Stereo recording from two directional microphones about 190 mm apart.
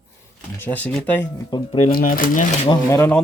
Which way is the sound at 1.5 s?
25° left (ahead or behind).